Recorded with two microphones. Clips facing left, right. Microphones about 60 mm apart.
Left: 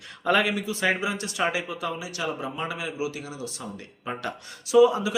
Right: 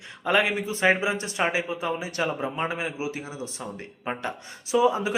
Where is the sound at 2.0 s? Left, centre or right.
Right.